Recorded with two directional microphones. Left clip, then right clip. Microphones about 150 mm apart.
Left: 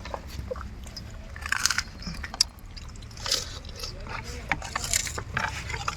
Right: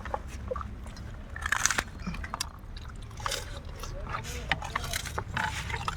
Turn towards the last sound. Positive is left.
turn(degrees=-25)  # may be behind; listen again after turning